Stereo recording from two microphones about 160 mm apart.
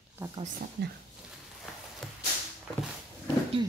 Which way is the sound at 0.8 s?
90° right.